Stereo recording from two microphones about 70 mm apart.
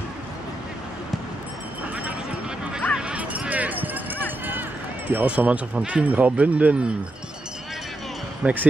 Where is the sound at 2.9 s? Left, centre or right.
Centre.